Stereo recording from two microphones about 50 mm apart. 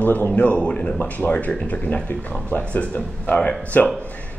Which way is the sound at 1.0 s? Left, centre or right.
Left.